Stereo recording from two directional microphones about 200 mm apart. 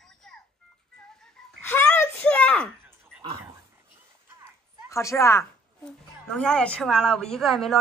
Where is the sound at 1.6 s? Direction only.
10° left (ahead or behind).